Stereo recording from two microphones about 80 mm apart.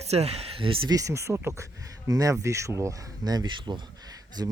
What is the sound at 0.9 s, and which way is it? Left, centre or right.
Speech, right.